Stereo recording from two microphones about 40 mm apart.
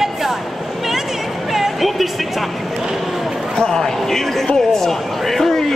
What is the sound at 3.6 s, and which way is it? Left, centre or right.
Speech, centre.